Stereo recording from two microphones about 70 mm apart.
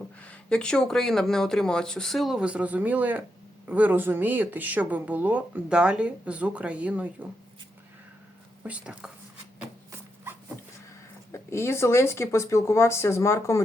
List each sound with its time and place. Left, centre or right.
0.2 s speech: centre
2.3 s speech: centre
8.6 s speech: centre
11.3 s speech: left